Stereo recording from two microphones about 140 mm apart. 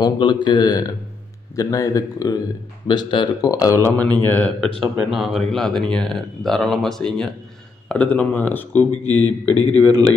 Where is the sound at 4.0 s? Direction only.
10° left (ahead or behind).